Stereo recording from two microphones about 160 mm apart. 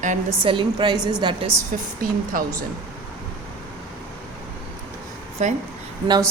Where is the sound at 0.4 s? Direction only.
30° right (ahead or behind).